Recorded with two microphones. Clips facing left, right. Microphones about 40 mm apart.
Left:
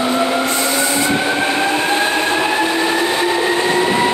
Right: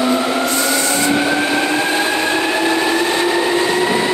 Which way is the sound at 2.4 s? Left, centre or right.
Centre.